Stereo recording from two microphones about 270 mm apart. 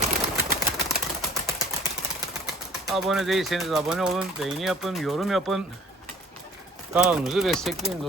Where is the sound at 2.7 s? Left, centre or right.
Centre.